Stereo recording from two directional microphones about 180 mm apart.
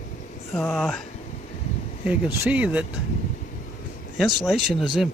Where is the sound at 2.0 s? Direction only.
10° right (ahead or behind).